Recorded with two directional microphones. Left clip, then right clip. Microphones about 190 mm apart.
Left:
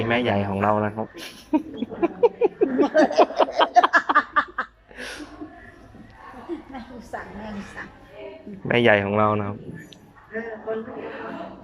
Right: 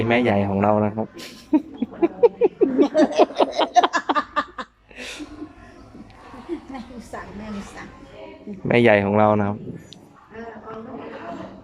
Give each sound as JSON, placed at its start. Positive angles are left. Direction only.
{"t": 0.0, "sound": "speech", "side_deg": -20}
{"t": 7.1, "sound": "a sound", "side_deg": -20}
{"t": 8.6, "sound": "speech", "side_deg": -20}